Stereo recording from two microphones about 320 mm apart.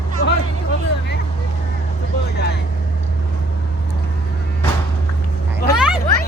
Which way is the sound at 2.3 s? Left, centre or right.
Left.